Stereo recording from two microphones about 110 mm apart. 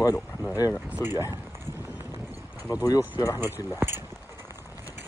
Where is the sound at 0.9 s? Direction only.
20° right (ahead or behind).